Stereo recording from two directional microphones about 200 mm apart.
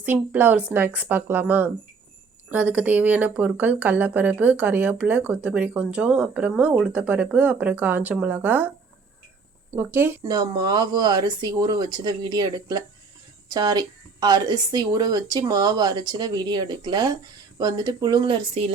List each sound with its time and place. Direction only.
0.0 s a woman's voice: 10° right (ahead or behind)
9.7 s a woman's voice: 10° right (ahead or behind); by 18.7 s 25° right (ahead or behind)